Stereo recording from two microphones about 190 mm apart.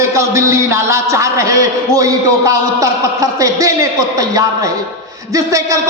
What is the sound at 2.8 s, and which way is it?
Speech, 15° right (ahead or behind).